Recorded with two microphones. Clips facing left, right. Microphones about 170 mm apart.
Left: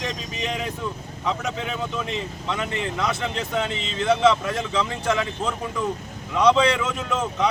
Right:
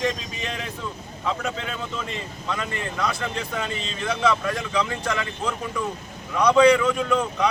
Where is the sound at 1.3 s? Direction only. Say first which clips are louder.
Left 1 dB; 15° left (ahead or behind).